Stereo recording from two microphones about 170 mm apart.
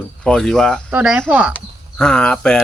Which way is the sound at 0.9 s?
5° right (ahead or behind).